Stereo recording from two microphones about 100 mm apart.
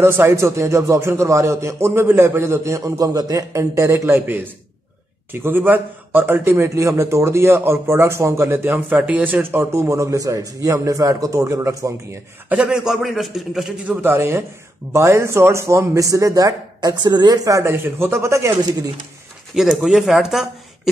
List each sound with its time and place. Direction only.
0.0 s a man's voice: 25° right (ahead or behind)
12.4 s a man's voice: 10° right (ahead or behind)
14.0 s a man's voice: 25° right (ahead or behind)
19.5 s speech: 5° right (ahead or behind)